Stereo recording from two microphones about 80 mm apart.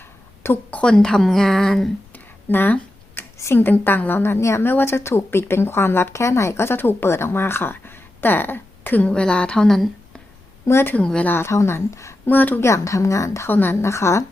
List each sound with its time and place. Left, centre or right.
0.4 s a woman's voice: left; by 1.9 s centre
2.1 s a sound: left
3.3 s a woman's voice: left; by 10.2 s centre
10.7 s a woman's voice: left
10.9 s speech: centre
11.3 s a woman's voice: left
12.3 s a woman's voice: left
12.6 s a woman's voice: left
13.5 s a woman's voice: left